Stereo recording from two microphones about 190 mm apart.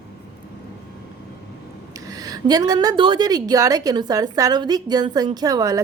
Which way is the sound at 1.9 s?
20° right (ahead or behind).